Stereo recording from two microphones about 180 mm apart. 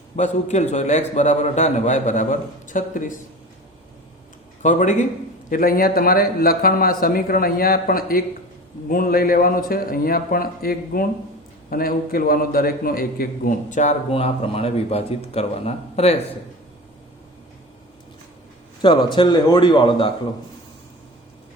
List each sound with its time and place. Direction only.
0.2 s a man's voice: 40° left (ahead or behind)
4.6 s a man's voice: 45° left (ahead or behind)
19.1 s a man's voice: 25° left (ahead or behind)